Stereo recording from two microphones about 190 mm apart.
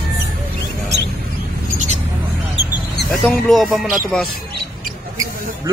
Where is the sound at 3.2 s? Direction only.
Centre (ahead or behind).